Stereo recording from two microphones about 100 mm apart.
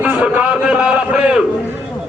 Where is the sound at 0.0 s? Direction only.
10° right (ahead or behind).